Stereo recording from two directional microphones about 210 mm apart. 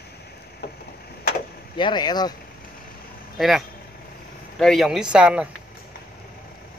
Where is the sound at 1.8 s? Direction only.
20° left (ahead or behind).